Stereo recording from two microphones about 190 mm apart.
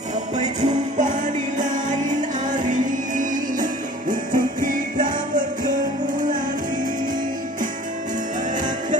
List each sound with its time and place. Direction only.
0.4 s music: 40° right (ahead or behind)